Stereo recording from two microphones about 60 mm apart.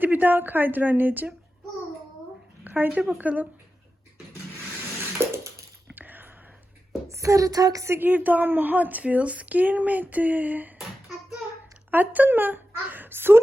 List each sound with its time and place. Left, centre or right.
0.0 s a woman's voice: right
2.6 s speech: right
5.3 s a sound: right
5.9 s a sound: right
7.1 s speech: right
8.0 s speech: right
11.9 s speech: right